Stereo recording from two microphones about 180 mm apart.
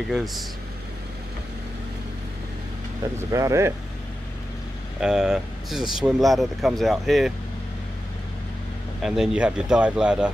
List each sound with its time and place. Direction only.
0.1 s speech: centre (ahead or behind)
3.2 s speech: 15° right (ahead or behind)
5.0 s speech: 5° right (ahead or behind)
9.0 s speech: 5° right (ahead or behind)